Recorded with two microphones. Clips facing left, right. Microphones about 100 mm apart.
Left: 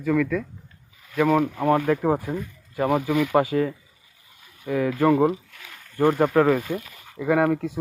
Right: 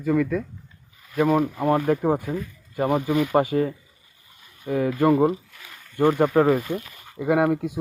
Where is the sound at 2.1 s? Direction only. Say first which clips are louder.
Even; centre (ahead or behind).